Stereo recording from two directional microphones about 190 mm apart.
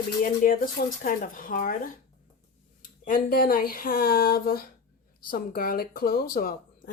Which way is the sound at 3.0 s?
50° left (ahead or behind).